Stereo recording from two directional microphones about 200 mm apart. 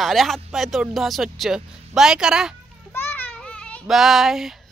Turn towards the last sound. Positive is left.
turn(degrees=0)  # may be behind; listen again after turning